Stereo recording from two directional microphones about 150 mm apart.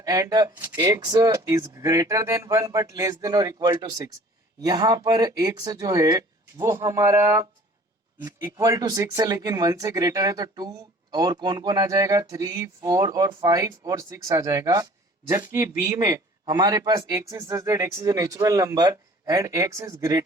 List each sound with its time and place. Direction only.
0.0 s speech: 25° right (ahead or behind)